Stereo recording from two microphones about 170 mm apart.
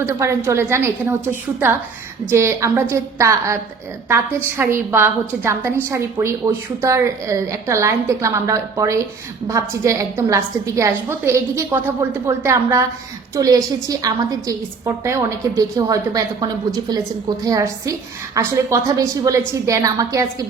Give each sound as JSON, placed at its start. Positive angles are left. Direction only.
{"t": 0.0, "sound": "a woman's voice", "side_deg": -15}